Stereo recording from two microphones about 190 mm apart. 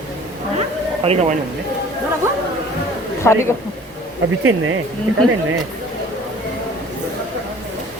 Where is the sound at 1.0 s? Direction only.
35° right (ahead or behind).